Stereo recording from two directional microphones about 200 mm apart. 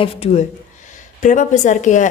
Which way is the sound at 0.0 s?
30° left (ahead or behind).